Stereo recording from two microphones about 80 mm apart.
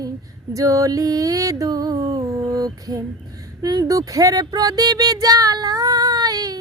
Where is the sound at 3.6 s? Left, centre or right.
Right.